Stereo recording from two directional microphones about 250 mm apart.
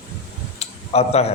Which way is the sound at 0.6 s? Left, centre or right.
Left.